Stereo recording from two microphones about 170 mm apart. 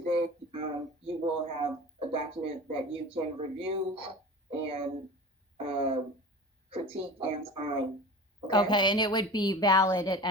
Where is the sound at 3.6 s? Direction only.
35° right (ahead or behind).